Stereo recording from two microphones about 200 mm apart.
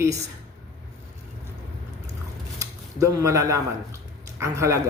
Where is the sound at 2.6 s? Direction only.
15° right (ahead or behind).